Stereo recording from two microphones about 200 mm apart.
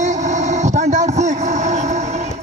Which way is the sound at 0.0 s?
35° right (ahead or behind).